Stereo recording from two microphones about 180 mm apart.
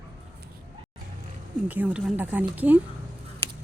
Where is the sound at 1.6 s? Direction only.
10° right (ahead or behind).